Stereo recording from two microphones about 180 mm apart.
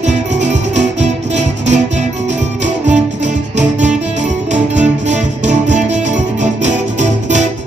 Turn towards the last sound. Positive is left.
turn(degrees=-40)  # may be behind; listen again after turning